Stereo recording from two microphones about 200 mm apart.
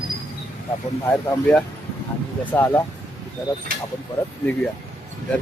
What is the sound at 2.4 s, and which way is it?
Speech, 10° left (ahead or behind).